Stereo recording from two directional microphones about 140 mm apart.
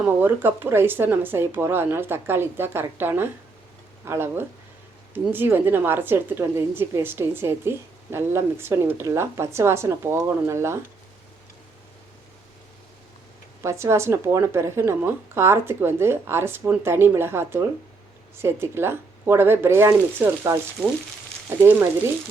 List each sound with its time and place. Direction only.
0.0 s a woman's voice: 15° right (ahead or behind)
13.6 s a woman's voice: 20° right (ahead or behind)
21.6 s a woman's voice: 15° right (ahead or behind)